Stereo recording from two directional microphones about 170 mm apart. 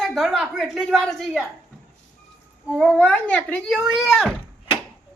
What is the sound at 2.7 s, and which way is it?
A woman's voice, centre (ahead or behind).